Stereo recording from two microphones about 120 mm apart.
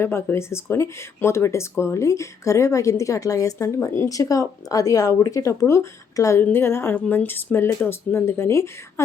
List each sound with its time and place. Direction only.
0.0 s speech: 20° left (ahead or behind)